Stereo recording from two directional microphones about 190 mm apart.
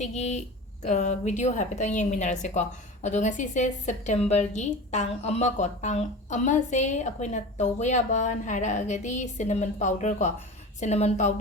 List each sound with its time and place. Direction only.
0.0 s a woman's voice: 35° left (ahead or behind)